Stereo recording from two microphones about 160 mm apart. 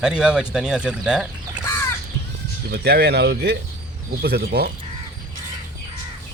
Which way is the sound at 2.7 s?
90° right.